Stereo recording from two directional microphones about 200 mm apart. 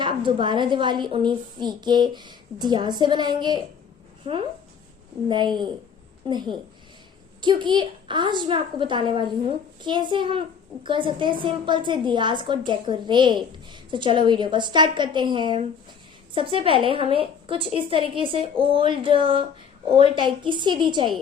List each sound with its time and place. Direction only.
0.0 s a woman's voice: 25° right (ahead or behind)
5.3 s a woman's voice: 20° right (ahead or behind)